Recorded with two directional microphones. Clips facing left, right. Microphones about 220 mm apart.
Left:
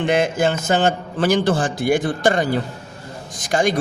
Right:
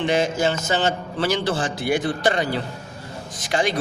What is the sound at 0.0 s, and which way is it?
A man's voice, 55° left (ahead or behind).